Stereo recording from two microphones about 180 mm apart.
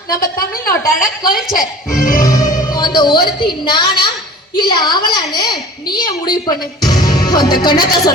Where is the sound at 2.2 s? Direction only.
20° left (ahead or behind).